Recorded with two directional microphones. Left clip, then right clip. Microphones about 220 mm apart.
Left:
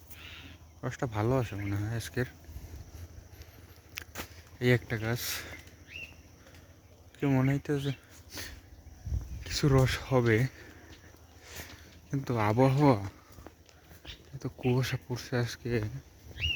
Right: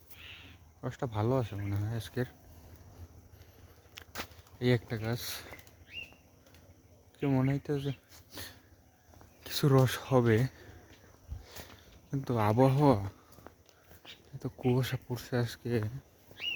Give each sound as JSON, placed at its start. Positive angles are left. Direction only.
{"t": 0.8, "sound": "speech", "side_deg": -5}
{"t": 3.9, "sound": "a sound", "side_deg": -5}
{"t": 7.2, "sound": "speech", "side_deg": -5}
{"t": 9.4, "sound": "speech", "side_deg": -25}
{"t": 11.4, "sound": "a sound", "side_deg": -5}
{"t": 14.3, "sound": "speech", "side_deg": -15}